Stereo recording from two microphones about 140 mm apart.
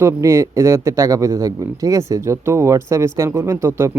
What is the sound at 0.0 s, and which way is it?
A man's voice, 20° right (ahead or behind).